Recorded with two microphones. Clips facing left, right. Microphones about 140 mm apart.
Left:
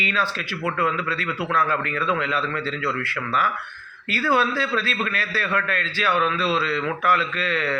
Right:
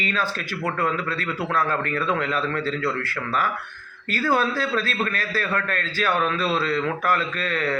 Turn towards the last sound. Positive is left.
turn(degrees=-45)  # may be behind; listen again after turning